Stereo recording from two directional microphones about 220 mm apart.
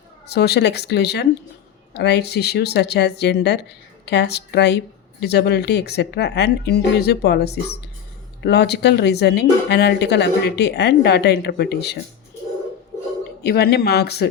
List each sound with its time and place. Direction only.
0.3 s speech: 50° left (ahead or behind)
13.4 s speech: 45° left (ahead or behind)